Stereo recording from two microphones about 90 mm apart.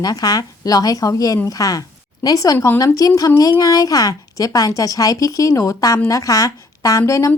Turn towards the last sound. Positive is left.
turn(degrees=35)  # may be behind; listen again after turning